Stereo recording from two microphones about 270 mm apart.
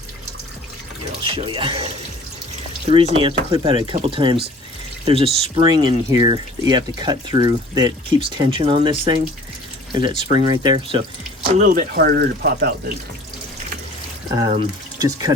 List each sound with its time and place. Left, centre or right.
1.2 s speech: centre
11.5 s speech: right
14.3 s speech: centre